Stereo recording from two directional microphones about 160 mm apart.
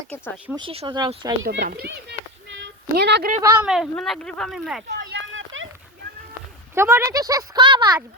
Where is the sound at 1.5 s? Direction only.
80° right.